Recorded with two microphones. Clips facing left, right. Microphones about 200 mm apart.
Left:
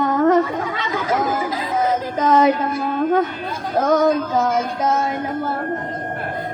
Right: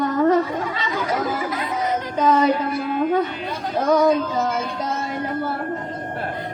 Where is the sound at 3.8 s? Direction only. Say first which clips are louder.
Even; 50° left (ahead or behind).